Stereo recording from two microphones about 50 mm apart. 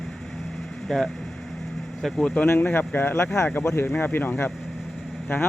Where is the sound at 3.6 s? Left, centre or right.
Left.